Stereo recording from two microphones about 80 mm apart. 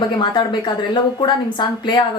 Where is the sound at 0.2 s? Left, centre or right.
Left.